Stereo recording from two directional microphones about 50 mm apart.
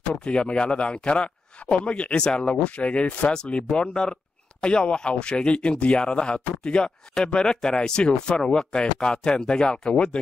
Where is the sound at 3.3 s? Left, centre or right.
Centre.